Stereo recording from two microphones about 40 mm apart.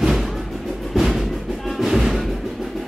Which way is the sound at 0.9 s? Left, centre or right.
Centre.